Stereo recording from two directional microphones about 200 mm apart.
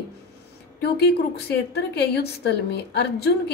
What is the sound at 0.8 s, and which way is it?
A woman's voice, 55° left (ahead or behind).